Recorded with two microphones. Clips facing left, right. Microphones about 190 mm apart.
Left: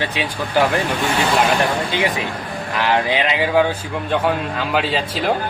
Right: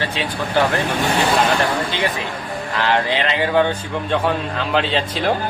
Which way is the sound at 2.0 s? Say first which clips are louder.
Left 2 dB; 15° left (ahead or behind).